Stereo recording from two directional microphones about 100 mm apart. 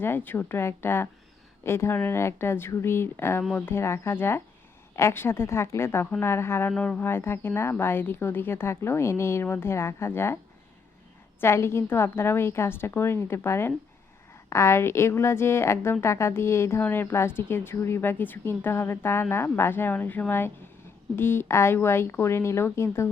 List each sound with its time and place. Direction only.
0.0 s a woman's voice: 20° left (ahead or behind)
11.3 s a woman's voice: 25° left (ahead or behind)